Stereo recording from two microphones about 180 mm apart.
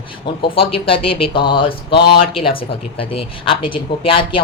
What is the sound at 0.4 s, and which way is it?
Speech, 30° left (ahead or behind).